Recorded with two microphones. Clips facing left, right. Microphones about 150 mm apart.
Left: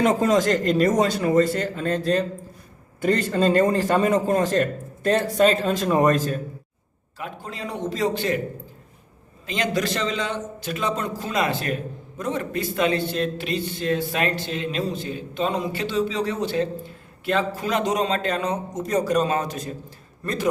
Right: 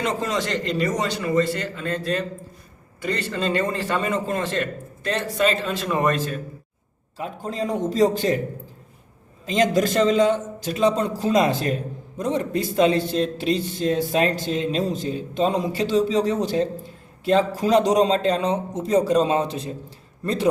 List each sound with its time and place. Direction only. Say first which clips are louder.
0.0 s a man's voice: left 6 dB; 45° left (ahead or behind)
7.2 s a man's voice: right 6 dB; 35° right (ahead or behind)
9.5 s a man's voice: right 5 dB; 40° right (ahead or behind)